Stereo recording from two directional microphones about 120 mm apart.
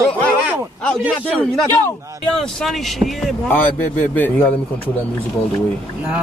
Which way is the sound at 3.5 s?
15° left (ahead or behind).